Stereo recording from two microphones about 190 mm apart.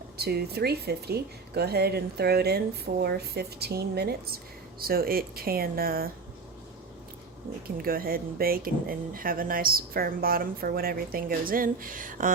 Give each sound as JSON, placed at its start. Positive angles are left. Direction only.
{"t": 0.2, "sound": "a woman's voice", "side_deg": -55}
{"t": 7.8, "sound": "speech", "side_deg": -50}